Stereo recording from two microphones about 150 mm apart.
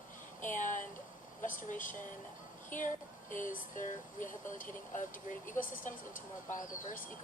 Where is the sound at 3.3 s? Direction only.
60° left (ahead or behind).